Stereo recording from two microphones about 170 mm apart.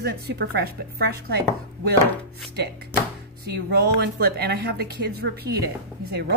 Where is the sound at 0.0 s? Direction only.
70° right (ahead or behind).